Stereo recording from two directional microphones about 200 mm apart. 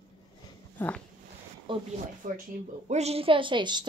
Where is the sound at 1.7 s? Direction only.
40° right (ahead or behind).